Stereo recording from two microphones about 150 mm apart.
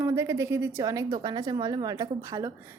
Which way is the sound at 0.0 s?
20° right (ahead or behind).